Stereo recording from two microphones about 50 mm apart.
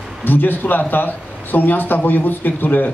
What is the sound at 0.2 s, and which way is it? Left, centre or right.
A man's voice, left.